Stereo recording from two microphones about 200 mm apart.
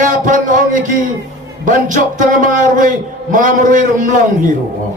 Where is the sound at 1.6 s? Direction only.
40° right (ahead or behind).